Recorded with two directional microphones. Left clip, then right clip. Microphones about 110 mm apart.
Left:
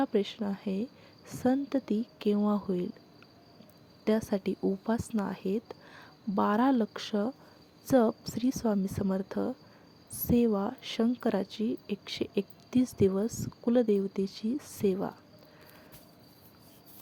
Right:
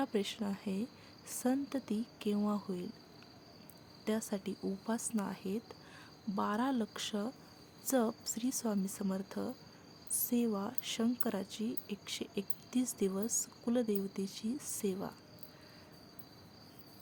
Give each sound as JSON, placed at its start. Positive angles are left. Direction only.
{"t": 0.0, "sound": "a woman's voice", "side_deg": 30}
{"t": 4.0, "sound": "a woman's voice", "side_deg": 40}